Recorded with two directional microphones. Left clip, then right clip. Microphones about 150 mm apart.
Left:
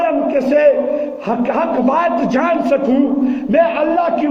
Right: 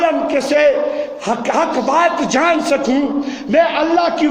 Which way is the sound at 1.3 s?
55° right (ahead or behind).